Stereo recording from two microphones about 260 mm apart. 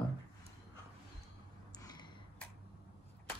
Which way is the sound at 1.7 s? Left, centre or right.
Centre.